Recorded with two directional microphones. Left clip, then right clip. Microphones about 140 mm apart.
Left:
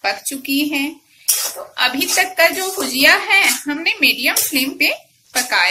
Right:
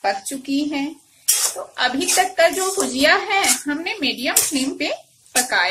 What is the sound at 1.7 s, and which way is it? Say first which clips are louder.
A woman's voice: left 3 dB; 35° right (ahead or behind).